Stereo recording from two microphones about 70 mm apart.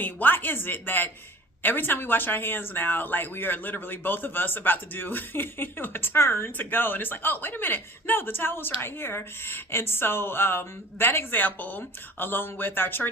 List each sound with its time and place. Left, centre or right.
0.0 s speech: left